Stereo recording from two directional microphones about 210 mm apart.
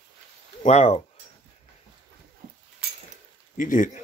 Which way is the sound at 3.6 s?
35° left (ahead or behind).